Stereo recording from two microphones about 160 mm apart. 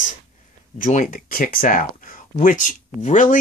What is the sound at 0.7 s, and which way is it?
Speech, 55° left (ahead or behind).